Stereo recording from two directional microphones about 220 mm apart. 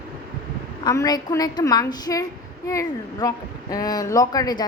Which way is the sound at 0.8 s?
15° left (ahead or behind).